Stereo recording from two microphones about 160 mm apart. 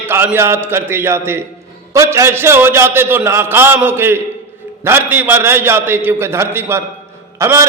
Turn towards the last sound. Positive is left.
turn(degrees=-15)  # may be behind; listen again after turning